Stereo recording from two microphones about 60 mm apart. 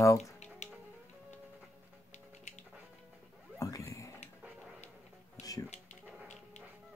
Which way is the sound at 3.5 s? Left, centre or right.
Left.